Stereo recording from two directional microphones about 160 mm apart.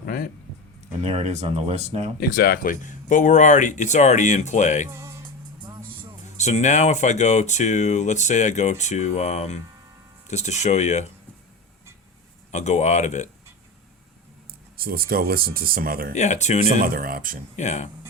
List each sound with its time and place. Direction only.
0.0 s a sound: 60° left (ahead or behind)
1.0 s speech: 45° right (ahead or behind)
2.3 s speech: 65° left (ahead or behind); by 4.9 s 50° left (ahead or behind)
6.3 s speech: 45° left (ahead or behind)
12.5 s speech: 45° left (ahead or behind)
14.8 s speech: 70° right (ahead or behind)
16.1 s speech: 45° left (ahead or behind)
16.8 s speech: 65° right (ahead or behind)
17.6 s speech: 45° left (ahead or behind)